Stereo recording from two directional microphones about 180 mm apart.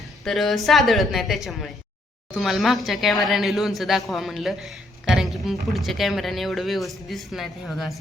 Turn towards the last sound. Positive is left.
turn(degrees=0)  # may be behind; listen again after turning